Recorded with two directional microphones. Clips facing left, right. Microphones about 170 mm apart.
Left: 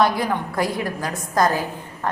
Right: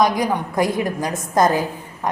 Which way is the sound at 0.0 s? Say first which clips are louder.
Right 2 dB; 15° right (ahead or behind).